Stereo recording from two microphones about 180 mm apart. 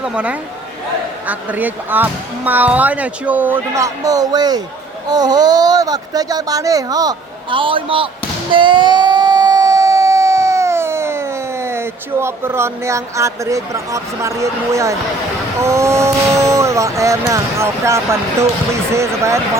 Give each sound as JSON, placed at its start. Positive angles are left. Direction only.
{"t": 0.0, "sound": "speech", "side_deg": -5}
{"t": 8.5, "sound": "a sound", "side_deg": -25}
{"t": 15.5, "sound": "speech", "side_deg": -15}